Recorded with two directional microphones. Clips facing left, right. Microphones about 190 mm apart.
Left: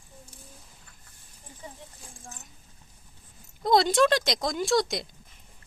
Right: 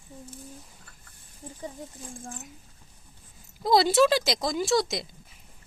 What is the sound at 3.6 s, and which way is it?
A woman's voice, centre (ahead or behind).